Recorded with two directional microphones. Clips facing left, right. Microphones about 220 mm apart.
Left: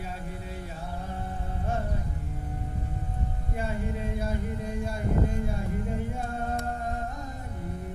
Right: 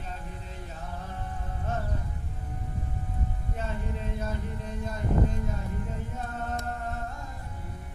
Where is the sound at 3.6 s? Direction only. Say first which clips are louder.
Left 4 dB; 10° left (ahead or behind).